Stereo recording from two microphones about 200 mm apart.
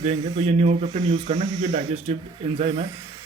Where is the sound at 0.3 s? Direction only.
30° right (ahead or behind).